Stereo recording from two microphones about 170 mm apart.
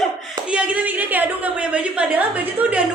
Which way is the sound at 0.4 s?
5° right (ahead or behind).